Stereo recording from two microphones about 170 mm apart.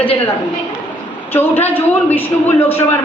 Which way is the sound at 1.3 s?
10° left (ahead or behind).